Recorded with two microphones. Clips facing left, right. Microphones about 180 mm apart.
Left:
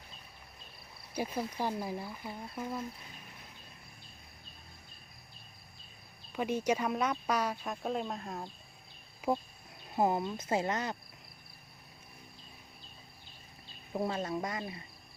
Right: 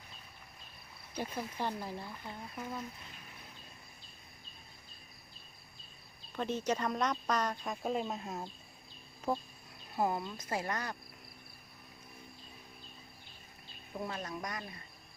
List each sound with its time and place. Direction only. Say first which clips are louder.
1.1 s speech: left 4 dB; 10° left (ahead or behind)
6.3 s speech: left 3 dB; 10° left (ahead or behind)
9.2 s speech: left 3 dB; 10° left (ahead or behind)
9.9 s speech: left 4 dB; 20° left (ahead or behind)
13.9 s speech: left 6 dB; 30° left (ahead or behind)